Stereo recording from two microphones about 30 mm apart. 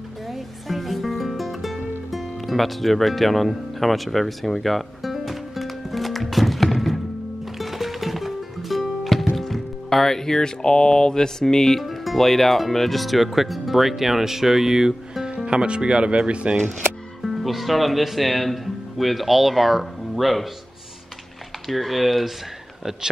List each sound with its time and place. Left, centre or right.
0.3 s music: centre
9.4 s speech: centre
11.8 s speech: centre
15.4 s speech: right
17.2 s speech: centre
21.6 s speech: centre